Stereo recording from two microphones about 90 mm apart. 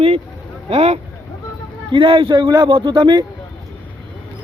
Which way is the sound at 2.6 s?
65° right (ahead or behind).